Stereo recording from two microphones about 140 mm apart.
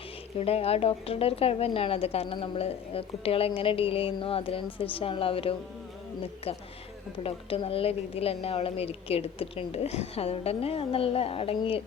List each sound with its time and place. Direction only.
0.3 s a woman's voice: 45° left (ahead or behind)
7.2 s a woman's voice: 40° left (ahead or behind)